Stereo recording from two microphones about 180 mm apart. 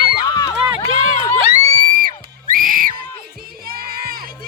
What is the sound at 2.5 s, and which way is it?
Screaming, 50° right (ahead or behind).